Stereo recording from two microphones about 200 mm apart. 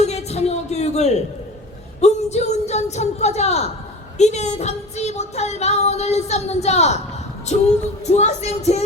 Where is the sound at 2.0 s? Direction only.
35° left (ahead or behind).